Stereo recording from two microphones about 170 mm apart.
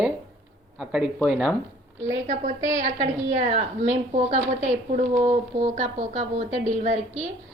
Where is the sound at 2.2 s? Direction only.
50° right (ahead or behind).